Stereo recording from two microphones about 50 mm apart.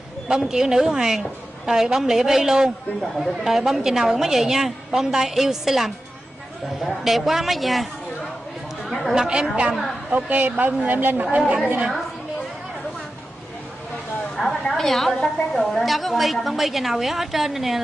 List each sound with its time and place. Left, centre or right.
0.3 s a woman's voice: centre
8.8 s chatter: centre
9.1 s a woman's voice: centre
10.1 s speech: right
11.3 s a woman's voice: right
14.3 s a woman's voice: centre